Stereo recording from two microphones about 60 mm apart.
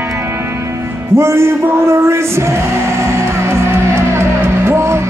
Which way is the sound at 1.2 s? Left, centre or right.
Right.